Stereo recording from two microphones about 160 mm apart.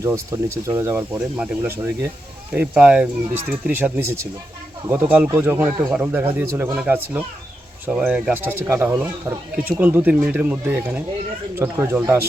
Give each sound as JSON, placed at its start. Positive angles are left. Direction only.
{"t": 0.0, "sound": "speech", "side_deg": -20}